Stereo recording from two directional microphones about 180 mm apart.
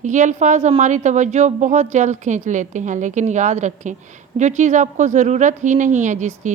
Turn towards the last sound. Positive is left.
turn(degrees=-40)  # may be behind; listen again after turning